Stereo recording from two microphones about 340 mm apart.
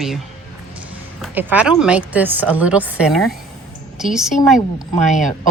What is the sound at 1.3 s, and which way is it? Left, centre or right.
A woman's voice, centre.